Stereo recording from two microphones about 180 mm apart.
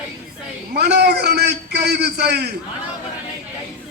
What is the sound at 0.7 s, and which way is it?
A man's voice, 65° right (ahead or behind).